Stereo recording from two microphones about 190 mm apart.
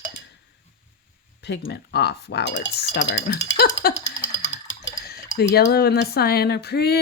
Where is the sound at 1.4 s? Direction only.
60° left (ahead or behind).